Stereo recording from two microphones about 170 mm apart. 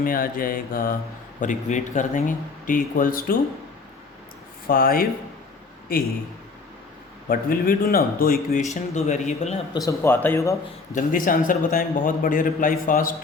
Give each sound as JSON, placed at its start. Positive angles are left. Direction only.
{"t": 0.0, "sound": "a man's voice", "side_deg": 55}
{"t": 4.6, "sound": "speech", "side_deg": 60}
{"t": 7.3, "sound": "speech", "side_deg": 60}
{"t": 8.7, "sound": "a man's voice", "side_deg": 45}
{"t": 9.7, "sound": "a man's voice", "side_deg": 20}
{"t": 10.9, "sound": "a man's voice", "side_deg": 55}